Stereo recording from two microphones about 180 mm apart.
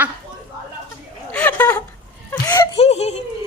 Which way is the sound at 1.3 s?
10° left (ahead or behind).